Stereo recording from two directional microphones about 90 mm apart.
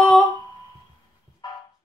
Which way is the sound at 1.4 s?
50° left (ahead or behind).